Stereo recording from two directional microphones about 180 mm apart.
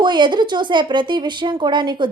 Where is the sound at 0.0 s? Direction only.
25° right (ahead or behind).